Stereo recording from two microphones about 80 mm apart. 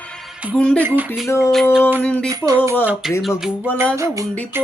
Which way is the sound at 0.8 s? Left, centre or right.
Right.